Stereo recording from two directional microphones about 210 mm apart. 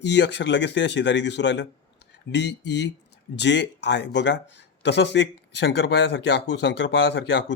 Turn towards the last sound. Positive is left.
turn(degrees=55)  # may be behind; listen again after turning